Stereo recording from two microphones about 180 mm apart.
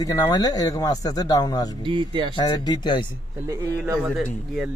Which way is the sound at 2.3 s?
25° left (ahead or behind).